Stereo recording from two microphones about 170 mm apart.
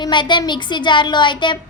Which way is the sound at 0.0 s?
25° left (ahead or behind).